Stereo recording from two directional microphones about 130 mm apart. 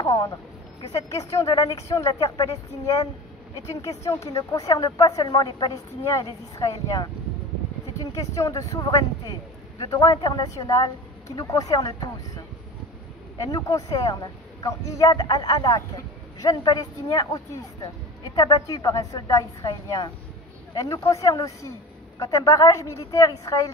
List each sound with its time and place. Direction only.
0.0 s a man's voice: 25° left (ahead or behind)
13.4 s a man's voice: 30° left (ahead or behind)